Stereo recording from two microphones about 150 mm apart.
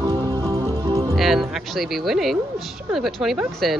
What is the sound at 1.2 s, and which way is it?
Speech, centre (ahead or behind).